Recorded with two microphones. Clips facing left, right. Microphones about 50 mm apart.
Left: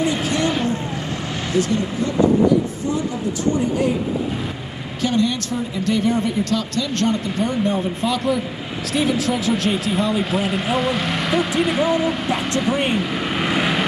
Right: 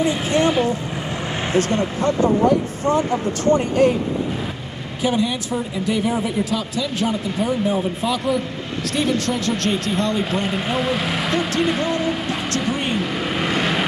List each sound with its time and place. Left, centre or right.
0.0 s vehicle: right
1.6 s speech: right
5.0 s speech: centre